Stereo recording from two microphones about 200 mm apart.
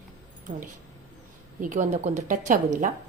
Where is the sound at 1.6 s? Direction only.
40° right (ahead or behind).